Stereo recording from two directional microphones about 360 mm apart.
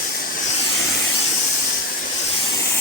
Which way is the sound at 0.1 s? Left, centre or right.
Left.